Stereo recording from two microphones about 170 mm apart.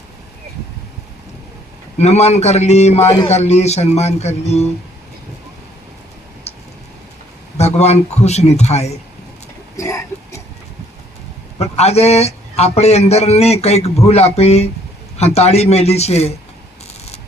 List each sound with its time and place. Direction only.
2.0 s a man's voice: 40° left (ahead or behind)
7.6 s a man's voice: 40° left (ahead or behind)
9.7 s a sound: 15° left (ahead or behind)
11.5 s a man's voice: 40° left (ahead or behind)